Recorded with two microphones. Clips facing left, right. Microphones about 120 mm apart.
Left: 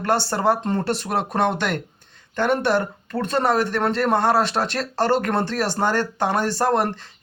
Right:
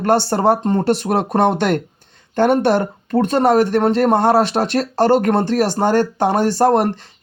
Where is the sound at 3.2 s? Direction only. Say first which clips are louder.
Right 5 dB; 20° right (ahead or behind).